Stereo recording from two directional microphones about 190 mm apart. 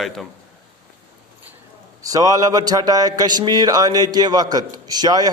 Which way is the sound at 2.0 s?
20° right (ahead or behind).